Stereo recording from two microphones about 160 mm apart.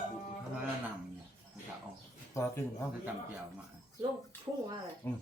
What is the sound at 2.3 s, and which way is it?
Speech, 15° left (ahead or behind).